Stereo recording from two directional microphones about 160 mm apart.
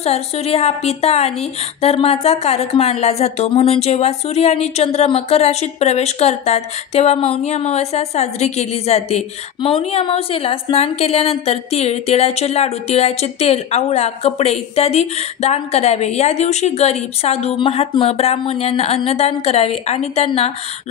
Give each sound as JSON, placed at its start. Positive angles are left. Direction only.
{"t": 0.0, "sound": "speech", "side_deg": 40}